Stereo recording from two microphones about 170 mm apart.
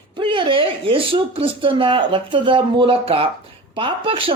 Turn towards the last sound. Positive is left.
turn(degrees=-30)  # may be behind; listen again after turning